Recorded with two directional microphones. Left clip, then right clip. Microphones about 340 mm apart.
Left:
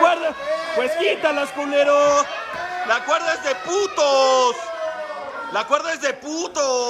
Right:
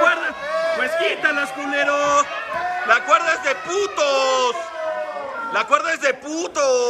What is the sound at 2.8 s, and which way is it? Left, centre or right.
A man's voice, centre.